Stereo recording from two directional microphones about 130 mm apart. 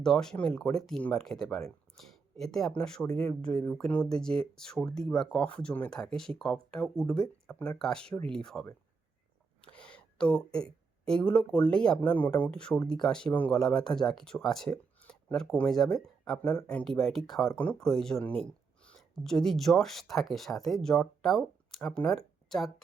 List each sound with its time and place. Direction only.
0.0 s speech: 5° left (ahead or behind)
9.7 s speech: 10° left (ahead or behind)